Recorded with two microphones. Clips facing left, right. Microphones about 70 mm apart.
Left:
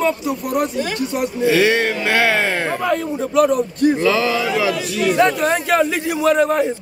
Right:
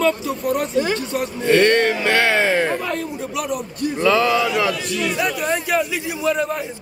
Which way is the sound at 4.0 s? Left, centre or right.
Centre.